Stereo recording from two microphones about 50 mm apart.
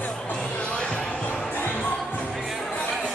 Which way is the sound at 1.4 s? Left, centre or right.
Left.